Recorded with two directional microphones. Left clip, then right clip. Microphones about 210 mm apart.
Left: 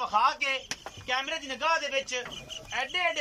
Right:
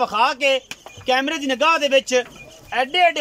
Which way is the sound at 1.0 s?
50° right (ahead or behind).